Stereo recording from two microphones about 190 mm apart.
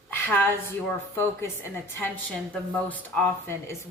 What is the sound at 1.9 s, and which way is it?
A woman's voice, 10° left (ahead or behind).